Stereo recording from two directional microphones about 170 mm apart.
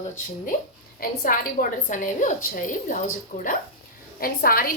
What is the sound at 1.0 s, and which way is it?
A woman's voice, 55° left (ahead or behind).